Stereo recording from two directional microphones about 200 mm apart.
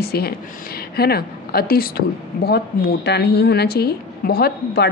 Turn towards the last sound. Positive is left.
turn(degrees=50)  # may be behind; listen again after turning